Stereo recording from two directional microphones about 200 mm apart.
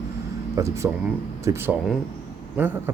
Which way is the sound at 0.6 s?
15° right (ahead or behind).